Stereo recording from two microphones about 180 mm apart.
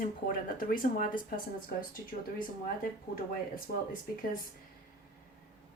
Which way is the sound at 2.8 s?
50° left (ahead or behind).